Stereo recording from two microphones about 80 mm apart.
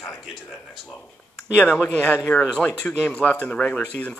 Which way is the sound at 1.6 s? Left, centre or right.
Centre.